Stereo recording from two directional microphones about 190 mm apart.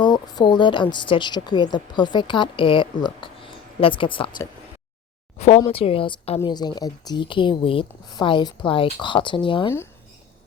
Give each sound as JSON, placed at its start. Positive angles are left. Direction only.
{"t": 0.0, "sound": "a woman's voice", "side_deg": 20}